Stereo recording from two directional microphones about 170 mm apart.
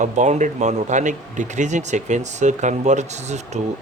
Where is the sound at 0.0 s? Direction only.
45° right (ahead or behind).